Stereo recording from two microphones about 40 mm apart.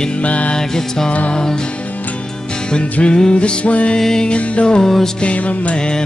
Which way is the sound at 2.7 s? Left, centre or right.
Left.